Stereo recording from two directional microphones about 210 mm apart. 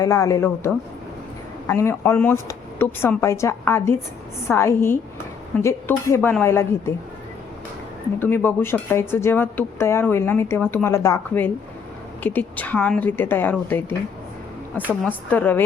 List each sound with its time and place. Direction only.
0.0 s speech: 15° left (ahead or behind)
8.2 s speech: 10° left (ahead or behind)
15.0 s speech: 10° left (ahead or behind)